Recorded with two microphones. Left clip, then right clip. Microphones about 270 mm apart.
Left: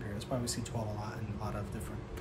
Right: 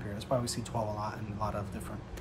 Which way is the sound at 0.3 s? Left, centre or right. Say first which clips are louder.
Right 6 dB; centre.